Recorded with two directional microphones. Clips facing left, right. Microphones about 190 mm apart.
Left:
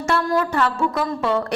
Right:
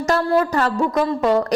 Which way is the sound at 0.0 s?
35° right (ahead or behind).